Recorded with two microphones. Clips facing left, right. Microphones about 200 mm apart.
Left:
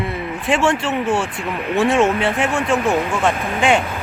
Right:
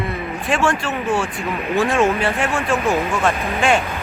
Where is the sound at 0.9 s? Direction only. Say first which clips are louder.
Left 2 dB; centre (ahead or behind).